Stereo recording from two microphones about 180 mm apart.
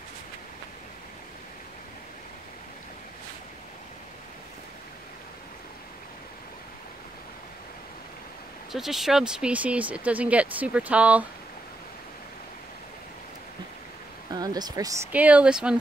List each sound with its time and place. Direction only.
8.7 s speech: centre (ahead or behind)
14.3 s speech: 20° right (ahead or behind)
15.1 s speech: 5° right (ahead or behind)